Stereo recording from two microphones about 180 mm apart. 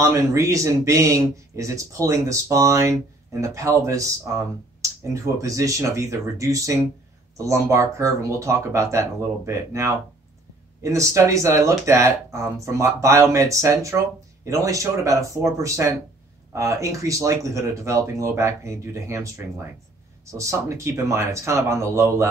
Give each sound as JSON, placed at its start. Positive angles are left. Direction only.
{"t": 0.0, "sound": "speech", "side_deg": -15}